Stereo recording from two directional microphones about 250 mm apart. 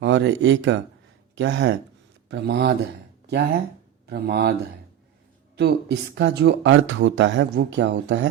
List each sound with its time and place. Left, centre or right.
0.0 s speech: right
4.0 s speech: right
5.5 s speech: right